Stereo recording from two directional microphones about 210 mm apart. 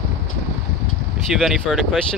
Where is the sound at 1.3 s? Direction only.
Centre (ahead or behind).